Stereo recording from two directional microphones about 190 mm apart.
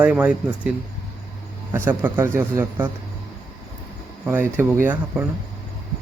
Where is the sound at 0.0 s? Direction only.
10° right (ahead or behind).